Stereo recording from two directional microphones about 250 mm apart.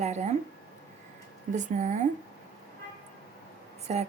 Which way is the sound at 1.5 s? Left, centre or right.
Right.